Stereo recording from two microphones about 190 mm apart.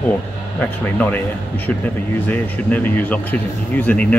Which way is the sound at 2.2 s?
10° left (ahead or behind).